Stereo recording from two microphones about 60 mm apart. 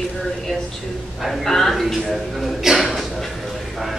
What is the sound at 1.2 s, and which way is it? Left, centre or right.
A man's voice, centre.